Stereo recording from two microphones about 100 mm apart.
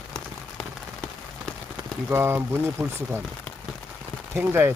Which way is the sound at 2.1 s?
25° right (ahead or behind).